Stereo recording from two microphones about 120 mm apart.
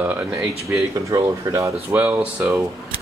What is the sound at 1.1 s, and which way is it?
Speech, 25° right (ahead or behind).